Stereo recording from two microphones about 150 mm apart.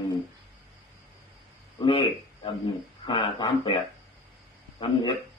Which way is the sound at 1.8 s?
35° left (ahead or behind).